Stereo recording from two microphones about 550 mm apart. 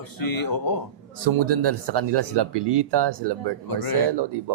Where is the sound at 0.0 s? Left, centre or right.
Left.